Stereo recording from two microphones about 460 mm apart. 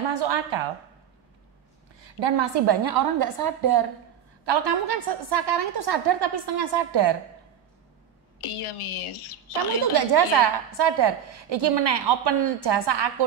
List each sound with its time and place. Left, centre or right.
0.1 s a woman's voice: right
2.0 s a woman's voice: right
4.5 s a woman's voice: right
8.5 s a woman's voice: left
9.8 s a woman's voice: right